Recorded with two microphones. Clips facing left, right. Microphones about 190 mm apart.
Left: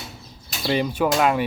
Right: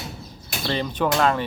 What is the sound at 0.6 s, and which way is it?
Speech, 10° left (ahead or behind).